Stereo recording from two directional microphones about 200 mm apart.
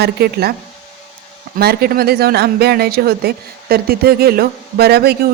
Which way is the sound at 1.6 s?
50° right (ahead or behind).